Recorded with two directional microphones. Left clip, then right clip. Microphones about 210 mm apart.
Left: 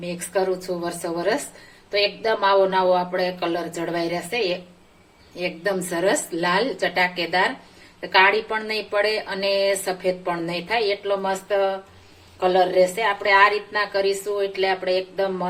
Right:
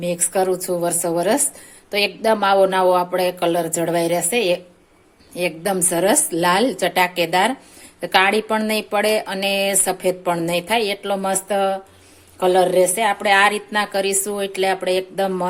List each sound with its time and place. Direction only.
0.0 s a woman's voice: 55° right (ahead or behind)